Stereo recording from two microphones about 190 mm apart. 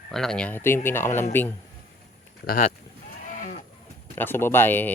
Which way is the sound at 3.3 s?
40° left (ahead or behind).